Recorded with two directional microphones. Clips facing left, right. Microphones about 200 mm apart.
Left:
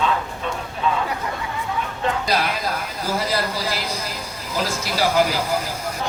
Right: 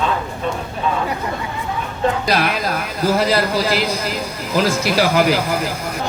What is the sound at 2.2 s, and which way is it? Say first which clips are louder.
A man's voice: right 4 dB; 75° right (ahead or behind).